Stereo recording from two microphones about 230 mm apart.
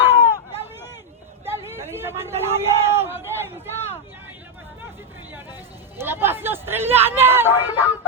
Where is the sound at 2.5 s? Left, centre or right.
Centre.